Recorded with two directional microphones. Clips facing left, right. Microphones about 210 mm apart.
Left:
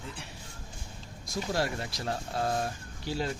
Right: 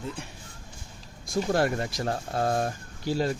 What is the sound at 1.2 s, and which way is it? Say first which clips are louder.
Speech: right 6 dB; 55° right (ahead or behind).